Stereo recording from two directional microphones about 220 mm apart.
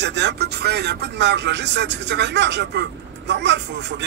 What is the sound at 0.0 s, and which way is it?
Speech, 55° right (ahead or behind).